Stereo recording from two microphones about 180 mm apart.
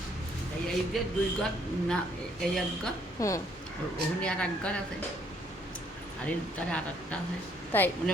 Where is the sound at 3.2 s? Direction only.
15° left (ahead or behind).